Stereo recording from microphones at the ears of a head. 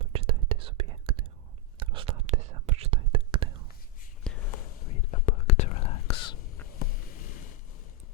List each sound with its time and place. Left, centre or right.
0.0 s whispering: right
4.3 s whispering: left